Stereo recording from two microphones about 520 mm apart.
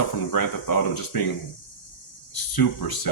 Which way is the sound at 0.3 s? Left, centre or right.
Left.